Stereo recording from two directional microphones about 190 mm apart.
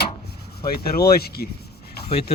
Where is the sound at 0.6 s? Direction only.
55° left (ahead or behind).